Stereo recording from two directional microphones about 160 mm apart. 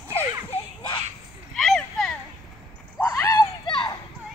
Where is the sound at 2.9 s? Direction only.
20° left (ahead or behind).